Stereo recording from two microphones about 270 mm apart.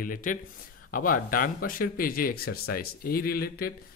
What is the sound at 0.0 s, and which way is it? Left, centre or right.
Speech, left.